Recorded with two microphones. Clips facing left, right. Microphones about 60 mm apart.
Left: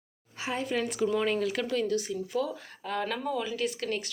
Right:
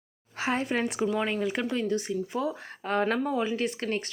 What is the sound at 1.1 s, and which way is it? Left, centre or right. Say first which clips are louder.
Speech: even; centre.